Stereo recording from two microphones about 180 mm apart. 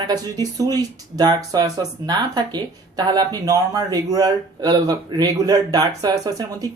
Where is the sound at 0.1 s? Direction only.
20° right (ahead or behind).